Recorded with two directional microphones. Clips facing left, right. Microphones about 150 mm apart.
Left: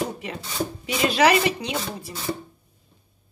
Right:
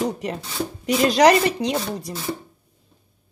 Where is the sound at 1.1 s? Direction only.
40° right (ahead or behind).